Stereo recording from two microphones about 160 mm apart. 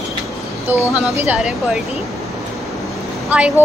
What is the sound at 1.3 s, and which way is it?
Speech, centre (ahead or behind).